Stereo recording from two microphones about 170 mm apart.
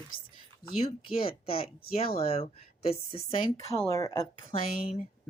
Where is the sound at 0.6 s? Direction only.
60° left (ahead or behind).